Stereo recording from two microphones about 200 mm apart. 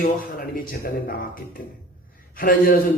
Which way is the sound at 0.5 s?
45° left (ahead or behind).